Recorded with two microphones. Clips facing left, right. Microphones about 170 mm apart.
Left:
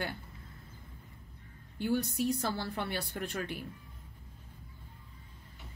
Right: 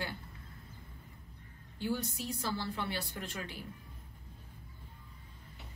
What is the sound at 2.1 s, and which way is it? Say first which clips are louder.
A woman's voice: left 6 dB; 55° left (ahead or behind).